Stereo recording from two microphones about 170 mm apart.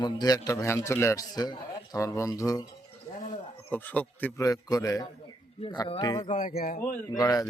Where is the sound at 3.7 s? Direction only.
10° left (ahead or behind).